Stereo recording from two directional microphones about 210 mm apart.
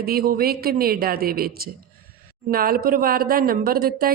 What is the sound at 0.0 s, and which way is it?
A woman's voice, 45° right (ahead or behind).